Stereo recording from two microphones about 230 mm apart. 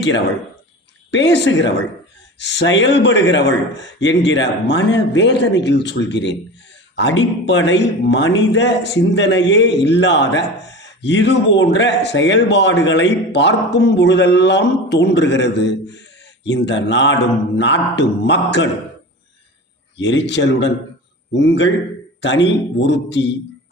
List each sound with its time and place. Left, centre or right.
1.1 s speech: left
20.0 s speech: left